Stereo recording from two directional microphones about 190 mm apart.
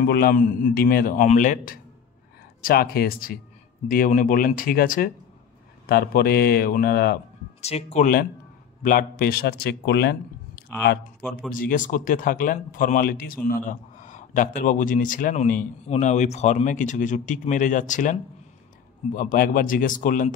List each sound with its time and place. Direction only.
0.0 s a man's voice: 55° left (ahead or behind)
7.6 s speech: 35° left (ahead or behind)
8.8 s speech: 45° left (ahead or behind)
11.2 s speech: 5° left (ahead or behind)
11.5 s a man's voice: 45° left (ahead or behind)